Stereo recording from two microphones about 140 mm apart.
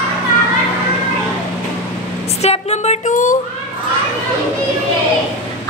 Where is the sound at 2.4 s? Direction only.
50° left (ahead or behind).